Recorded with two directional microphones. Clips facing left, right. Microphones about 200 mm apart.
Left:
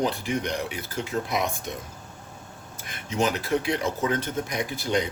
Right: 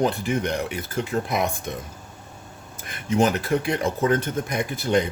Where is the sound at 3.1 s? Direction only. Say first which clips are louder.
Right 4 dB; 50° right (ahead or behind).